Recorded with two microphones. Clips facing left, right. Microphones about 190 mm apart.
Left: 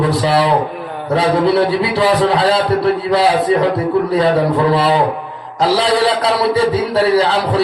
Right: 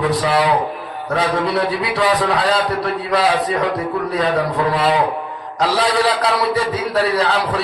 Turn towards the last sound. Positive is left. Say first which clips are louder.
# left 5 dB
turn(degrees=30)  # may be behind; listen again after turning